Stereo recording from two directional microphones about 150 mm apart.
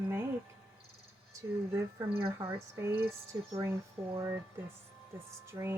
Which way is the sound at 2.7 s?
15° right (ahead or behind).